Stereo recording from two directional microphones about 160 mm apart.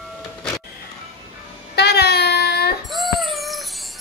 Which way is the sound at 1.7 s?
90° left.